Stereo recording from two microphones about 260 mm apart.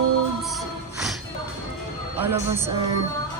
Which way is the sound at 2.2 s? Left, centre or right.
Centre.